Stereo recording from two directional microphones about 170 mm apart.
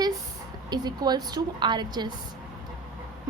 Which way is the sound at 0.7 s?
25° right (ahead or behind).